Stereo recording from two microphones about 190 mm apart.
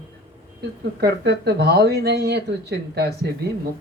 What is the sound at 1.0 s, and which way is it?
A woman's voice, 60° right (ahead or behind).